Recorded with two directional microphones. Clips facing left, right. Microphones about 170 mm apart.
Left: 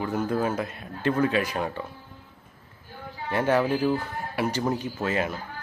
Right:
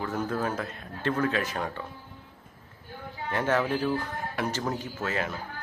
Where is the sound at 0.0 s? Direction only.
10° left (ahead or behind).